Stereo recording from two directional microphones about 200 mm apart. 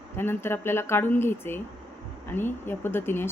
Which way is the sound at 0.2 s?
10° left (ahead or behind).